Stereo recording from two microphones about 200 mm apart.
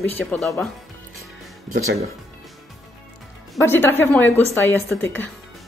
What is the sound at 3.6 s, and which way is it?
Speech, 10° left (ahead or behind).